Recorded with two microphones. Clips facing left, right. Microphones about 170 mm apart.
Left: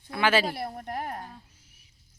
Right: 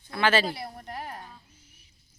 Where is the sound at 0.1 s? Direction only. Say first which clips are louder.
Even; 10° left (ahead or behind).